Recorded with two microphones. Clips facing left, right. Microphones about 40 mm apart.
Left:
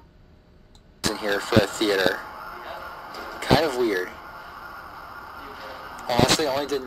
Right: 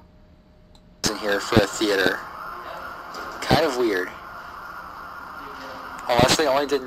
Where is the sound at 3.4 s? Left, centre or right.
Centre.